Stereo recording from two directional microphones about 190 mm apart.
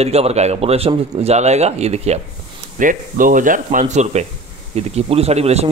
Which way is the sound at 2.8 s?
45° right (ahead or behind).